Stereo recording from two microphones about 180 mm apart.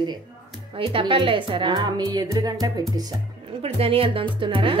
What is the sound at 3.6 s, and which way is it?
Speech, 30° right (ahead or behind).